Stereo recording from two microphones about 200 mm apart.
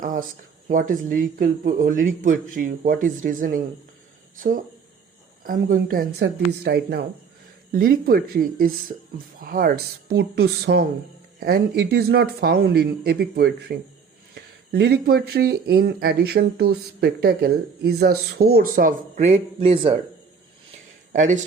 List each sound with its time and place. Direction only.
0.0 s cricket: 40° right (ahead or behind)
0.7 s speech: 40° right (ahead or behind); by 20.0 s 25° right (ahead or behind)
21.1 s speech: 40° right (ahead or behind)